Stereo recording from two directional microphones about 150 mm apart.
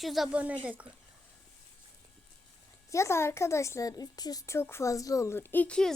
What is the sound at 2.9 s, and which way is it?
A woman's voice, 20° left (ahead or behind).